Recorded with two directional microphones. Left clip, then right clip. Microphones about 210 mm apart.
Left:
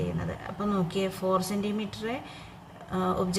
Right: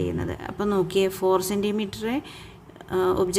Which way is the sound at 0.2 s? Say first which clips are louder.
Right 5 dB; 50° right (ahead or behind).